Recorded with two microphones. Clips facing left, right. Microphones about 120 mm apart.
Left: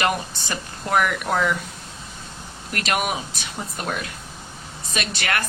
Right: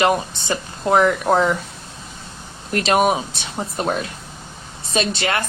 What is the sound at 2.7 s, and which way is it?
A woman's voice, 30° right (ahead or behind).